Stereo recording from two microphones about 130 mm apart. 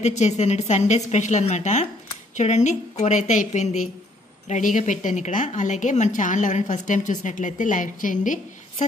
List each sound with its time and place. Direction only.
0.0 s a woman's voice: 60° left (ahead or behind)
4.5 s a woman's voice: 80° left